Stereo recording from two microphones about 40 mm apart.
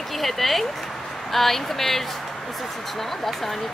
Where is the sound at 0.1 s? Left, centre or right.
Centre.